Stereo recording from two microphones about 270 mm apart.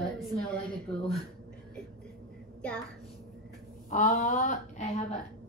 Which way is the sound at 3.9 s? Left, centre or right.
Left.